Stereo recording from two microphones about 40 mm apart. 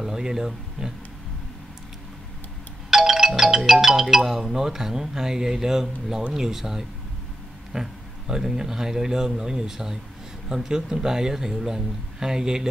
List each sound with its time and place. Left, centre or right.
0.0 s speech: centre
2.9 s a man's voice: centre